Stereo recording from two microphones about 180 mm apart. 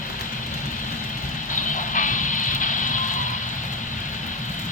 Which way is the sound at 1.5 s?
45° left (ahead or behind).